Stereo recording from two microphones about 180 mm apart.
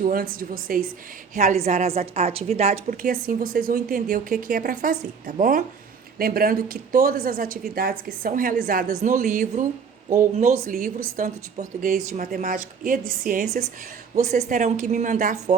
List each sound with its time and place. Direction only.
0.0 s a woman's voice: 55° right (ahead or behind)
1.4 s a woman's voice: 40° right (ahead or behind)
3.0 s a woman's voice: 55° right (ahead or behind)
14.2 s a woman's voice: 40° right (ahead or behind)